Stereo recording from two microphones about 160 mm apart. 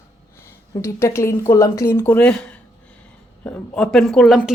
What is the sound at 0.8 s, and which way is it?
A woman's voice, 15° left (ahead or behind).